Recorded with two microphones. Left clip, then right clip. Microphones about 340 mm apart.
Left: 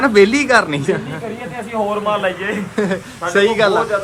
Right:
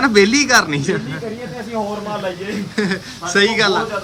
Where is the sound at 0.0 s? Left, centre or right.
Centre.